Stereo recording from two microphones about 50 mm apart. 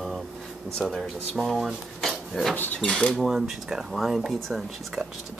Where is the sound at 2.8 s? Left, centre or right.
Centre.